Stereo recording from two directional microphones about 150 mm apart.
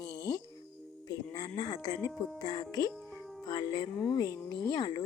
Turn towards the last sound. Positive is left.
turn(degrees=25)  # may be behind; listen again after turning